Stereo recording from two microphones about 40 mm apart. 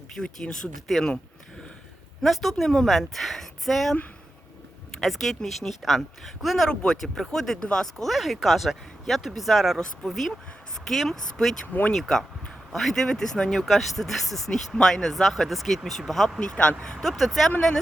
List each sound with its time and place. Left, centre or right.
0.1 s speech: centre
2.2 s speech: centre
4.9 s speech: centre
8.0 s speech: centre
9.7 s speech: left
10.1 s speech: centre
13.7 s speech: centre
16.4 s speech: left
17.0 s speech: centre